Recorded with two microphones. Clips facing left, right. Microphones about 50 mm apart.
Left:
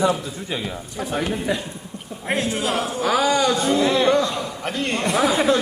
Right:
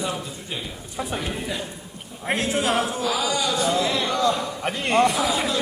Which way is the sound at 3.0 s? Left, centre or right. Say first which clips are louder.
Left 5 dB; left.